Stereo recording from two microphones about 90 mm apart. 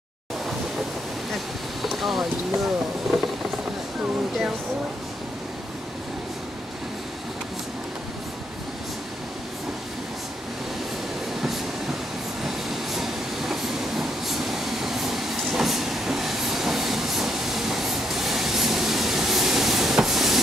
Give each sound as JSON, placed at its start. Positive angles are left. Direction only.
{"t": 1.3, "sound": "boat", "side_deg": 0}
{"t": 12.4, "sound": "train", "side_deg": -5}